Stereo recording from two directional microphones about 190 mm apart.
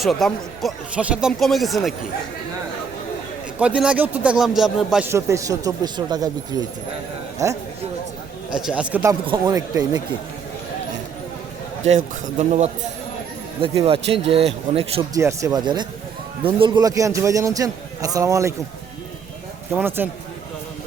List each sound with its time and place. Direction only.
0.0 s speech: centre (ahead or behind)
3.6 s speech: 5° right (ahead or behind)
5.0 s a man's voice: 15° right (ahead or behind)
8.5 s a man's voice: 5° right (ahead or behind)
9.2 s speech: 20° right (ahead or behind)
11.9 s speech: 35° right (ahead or behind)
15.1 s a man's voice: 15° right (ahead or behind)
19.7 s a man's voice: 10° right (ahead or behind)